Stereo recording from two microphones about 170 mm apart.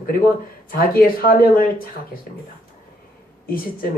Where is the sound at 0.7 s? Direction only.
60° left (ahead or behind).